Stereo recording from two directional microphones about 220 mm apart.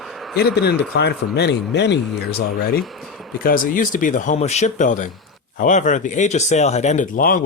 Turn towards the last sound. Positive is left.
turn(degrees=40)  # may be behind; listen again after turning